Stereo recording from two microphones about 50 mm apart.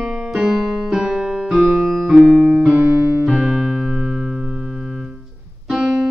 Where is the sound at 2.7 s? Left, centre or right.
Right.